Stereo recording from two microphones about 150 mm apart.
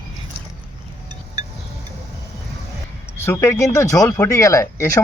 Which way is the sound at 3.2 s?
15° left (ahead or behind).